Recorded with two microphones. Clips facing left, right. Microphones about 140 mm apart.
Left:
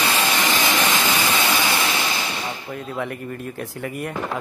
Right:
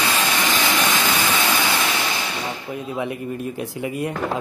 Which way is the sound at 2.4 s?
15° right (ahead or behind).